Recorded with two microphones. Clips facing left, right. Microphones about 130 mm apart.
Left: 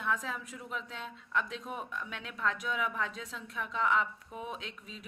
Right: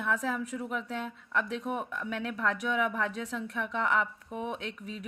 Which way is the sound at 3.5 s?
80° right.